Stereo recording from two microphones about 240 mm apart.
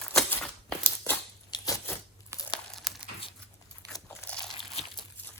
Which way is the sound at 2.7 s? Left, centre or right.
Centre.